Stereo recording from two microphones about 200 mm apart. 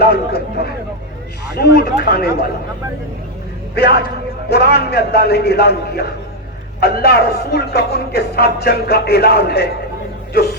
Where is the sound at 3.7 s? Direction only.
55° left (ahead or behind).